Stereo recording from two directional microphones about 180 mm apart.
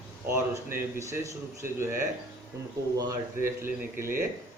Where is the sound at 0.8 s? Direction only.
15° right (ahead or behind).